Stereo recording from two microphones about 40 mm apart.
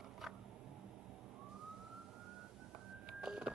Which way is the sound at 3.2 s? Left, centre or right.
Centre.